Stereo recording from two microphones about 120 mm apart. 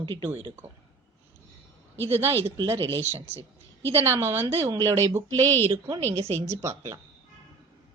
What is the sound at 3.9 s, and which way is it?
A woman's voice, 20° right (ahead or behind).